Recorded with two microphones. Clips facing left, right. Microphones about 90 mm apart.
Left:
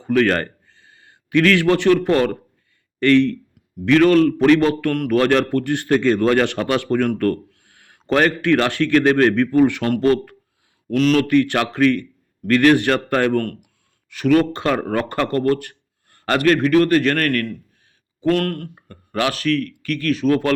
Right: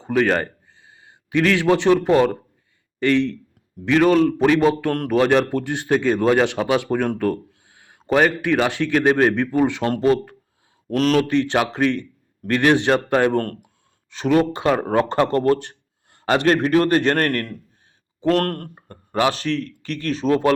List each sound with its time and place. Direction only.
0.0 s a man's voice: 15° right (ahead or behind)
10.8 s speech: 40° right (ahead or behind)
11.2 s a man's voice: 20° right (ahead or behind)
13.3 s a man's voice: 35° right (ahead or behind)
14.1 s speech: 20° right (ahead or behind)
16.0 s a sound: 20° right (ahead or behind)
16.4 s a man's voice: 30° right (ahead or behind)
18.9 s speech: 25° right (ahead or behind)